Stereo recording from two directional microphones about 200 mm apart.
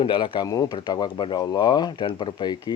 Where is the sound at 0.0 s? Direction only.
25° left (ahead or behind).